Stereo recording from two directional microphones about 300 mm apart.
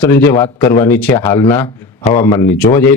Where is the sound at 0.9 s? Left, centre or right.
Centre.